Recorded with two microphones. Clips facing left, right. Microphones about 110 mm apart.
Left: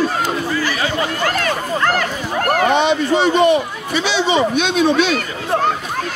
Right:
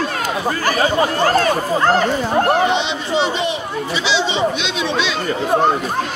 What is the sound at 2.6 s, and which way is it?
Speech, 50° left (ahead or behind).